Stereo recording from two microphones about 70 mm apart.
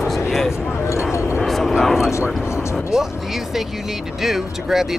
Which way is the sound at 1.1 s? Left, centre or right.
Left.